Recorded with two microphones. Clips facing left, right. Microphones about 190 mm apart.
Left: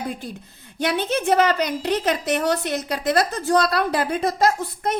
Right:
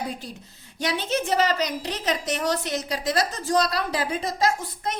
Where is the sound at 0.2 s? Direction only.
55° left (ahead or behind).